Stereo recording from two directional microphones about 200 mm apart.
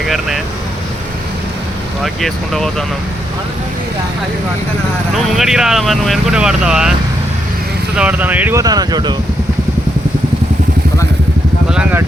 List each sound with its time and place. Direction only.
0.0 s vehicle: centre (ahead or behind)
2.2 s speech: centre (ahead or behind)
5.1 s speech: centre (ahead or behind)
7.9 s speech: 5° right (ahead or behind)
11.7 s speech: 5° right (ahead or behind)